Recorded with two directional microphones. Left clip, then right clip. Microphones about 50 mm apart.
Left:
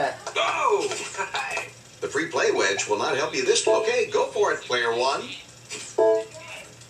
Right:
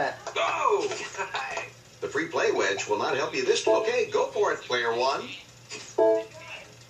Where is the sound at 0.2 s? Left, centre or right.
Centre.